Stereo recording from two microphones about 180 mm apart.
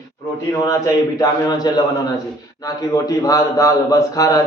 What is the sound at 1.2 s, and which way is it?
A man's voice, 20° left (ahead or behind).